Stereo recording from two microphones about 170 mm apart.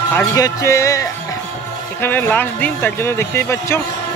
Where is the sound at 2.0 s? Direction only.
10° left (ahead or behind).